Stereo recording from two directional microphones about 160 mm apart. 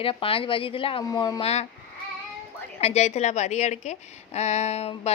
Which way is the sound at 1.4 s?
40° left (ahead or behind).